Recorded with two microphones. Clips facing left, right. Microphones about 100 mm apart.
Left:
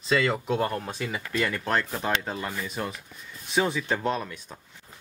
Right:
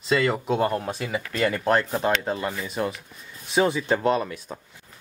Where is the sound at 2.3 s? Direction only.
5° right (ahead or behind).